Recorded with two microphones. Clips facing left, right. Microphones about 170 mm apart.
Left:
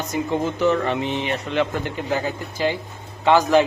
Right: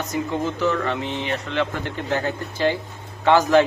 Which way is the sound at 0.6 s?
20° left (ahead or behind).